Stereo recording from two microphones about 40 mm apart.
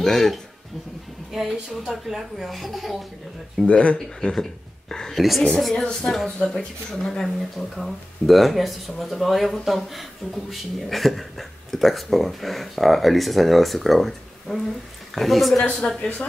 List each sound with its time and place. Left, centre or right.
0.0 s speech: centre
1.3 s speech: centre
3.6 s speech: left
4.2 s speech: centre
5.1 s speech: centre
5.9 s speech: centre
16.0 s speech: left